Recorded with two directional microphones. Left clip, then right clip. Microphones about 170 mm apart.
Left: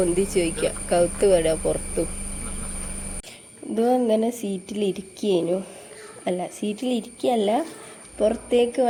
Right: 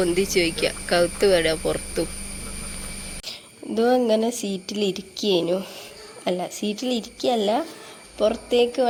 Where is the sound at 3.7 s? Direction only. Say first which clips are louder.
Right 1 dB; 5° left (ahead or behind).